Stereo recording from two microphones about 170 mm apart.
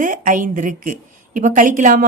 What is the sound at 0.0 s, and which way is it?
A woman's voice, 50° right (ahead or behind).